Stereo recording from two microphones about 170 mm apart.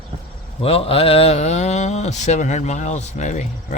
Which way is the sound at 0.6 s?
35° left (ahead or behind).